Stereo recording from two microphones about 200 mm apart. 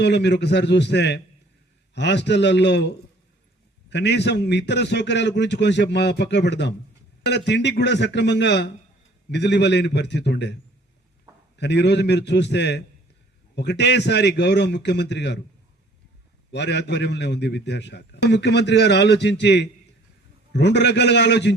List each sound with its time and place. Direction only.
0.0 s a man's voice: 60° left (ahead or behind)
16.5 s a man's voice: 60° left (ahead or behind)